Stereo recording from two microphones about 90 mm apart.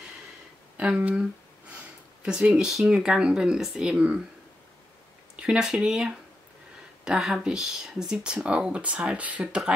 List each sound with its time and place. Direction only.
0.7 s speech: 15° right (ahead or behind)
2.2 s speech: 10° right (ahead or behind)
5.3 s speech: 10° right (ahead or behind)